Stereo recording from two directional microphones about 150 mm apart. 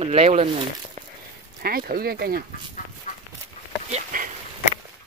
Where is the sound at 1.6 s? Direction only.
85° right.